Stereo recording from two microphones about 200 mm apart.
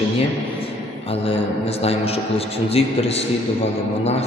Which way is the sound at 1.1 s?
30° left (ahead or behind).